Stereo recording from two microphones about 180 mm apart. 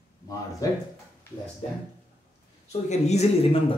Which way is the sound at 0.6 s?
20° left (ahead or behind).